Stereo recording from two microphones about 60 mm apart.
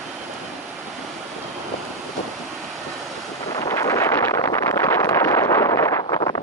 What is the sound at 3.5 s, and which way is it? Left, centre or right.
Wind noise, left.